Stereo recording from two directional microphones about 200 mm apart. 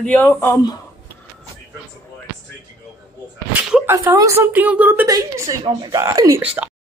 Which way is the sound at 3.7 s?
10° right (ahead or behind).